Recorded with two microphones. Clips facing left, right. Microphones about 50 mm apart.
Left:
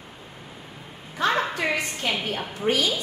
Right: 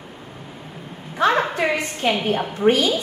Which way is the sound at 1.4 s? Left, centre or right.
Right.